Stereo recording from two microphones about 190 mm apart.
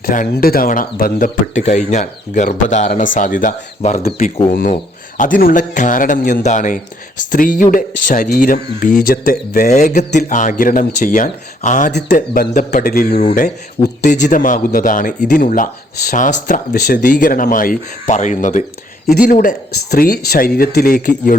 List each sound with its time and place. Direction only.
0.0 s speech: 45° left (ahead or behind)
11.9 s speech: 60° left (ahead or behind)
12.1 s speech: 45° left (ahead or behind)
19.0 s speech: 50° left (ahead or behind)